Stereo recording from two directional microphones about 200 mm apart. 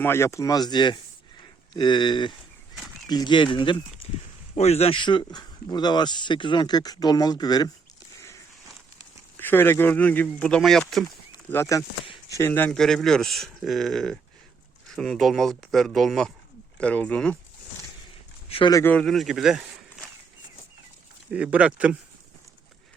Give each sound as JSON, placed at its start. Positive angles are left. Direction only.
{"t": 0.0, "sound": "speech", "side_deg": 10}
{"t": 9.4, "sound": "speech", "side_deg": 10}
{"t": 11.3, "sound": "speech", "side_deg": 15}
{"t": 18.4, "sound": "speech", "side_deg": 30}
{"t": 18.7, "sound": "speech", "side_deg": 10}
{"t": 21.2, "sound": "speech", "side_deg": -5}